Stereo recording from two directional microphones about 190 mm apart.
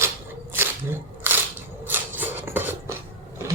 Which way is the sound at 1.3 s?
10° right (ahead or behind).